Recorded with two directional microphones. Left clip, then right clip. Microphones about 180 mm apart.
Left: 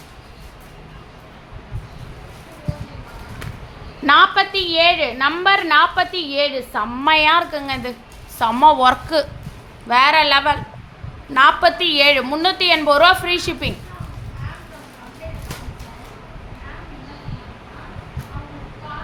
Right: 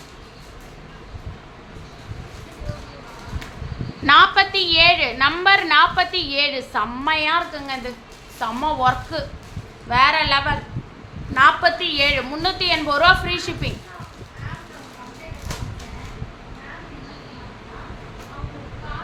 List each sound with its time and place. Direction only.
4.0 s a woman's voice: 25° left (ahead or behind)
7.0 s a woman's voice: 40° left (ahead or behind)